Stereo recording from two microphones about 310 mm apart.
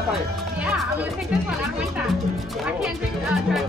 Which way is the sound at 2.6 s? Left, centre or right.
Centre.